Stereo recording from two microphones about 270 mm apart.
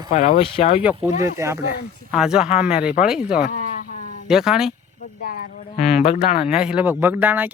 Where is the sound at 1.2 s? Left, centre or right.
Centre.